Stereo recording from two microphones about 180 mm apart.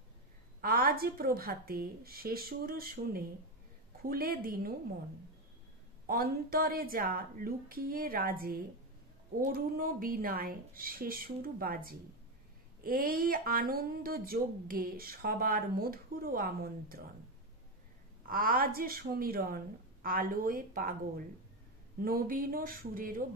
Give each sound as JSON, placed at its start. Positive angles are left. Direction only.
{"t": 0.6, "sound": "a woman's voice", "side_deg": -55}
{"t": 6.0, "sound": "a woman's voice", "side_deg": -55}
{"t": 18.2, "sound": "speech", "side_deg": -55}